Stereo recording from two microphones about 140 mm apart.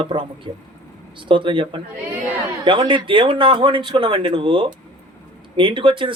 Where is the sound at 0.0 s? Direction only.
35° right (ahead or behind).